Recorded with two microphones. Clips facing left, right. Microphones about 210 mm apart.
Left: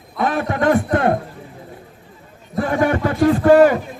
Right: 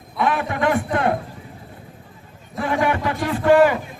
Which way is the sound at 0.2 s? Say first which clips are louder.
Left 2 dB; 40° left (ahead or behind).